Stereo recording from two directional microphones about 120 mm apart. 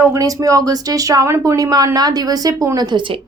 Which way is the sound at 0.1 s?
30° right (ahead or behind).